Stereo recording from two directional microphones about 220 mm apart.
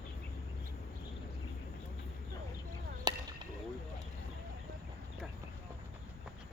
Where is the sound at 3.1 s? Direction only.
15° right (ahead or behind).